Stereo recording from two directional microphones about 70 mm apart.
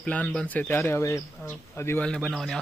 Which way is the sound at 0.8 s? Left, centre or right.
Left.